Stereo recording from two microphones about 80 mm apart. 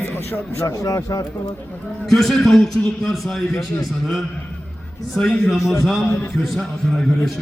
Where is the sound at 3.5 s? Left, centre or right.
Left.